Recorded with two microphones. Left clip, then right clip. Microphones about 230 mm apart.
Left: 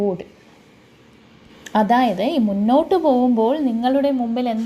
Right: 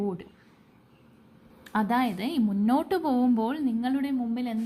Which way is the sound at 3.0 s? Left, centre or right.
Right.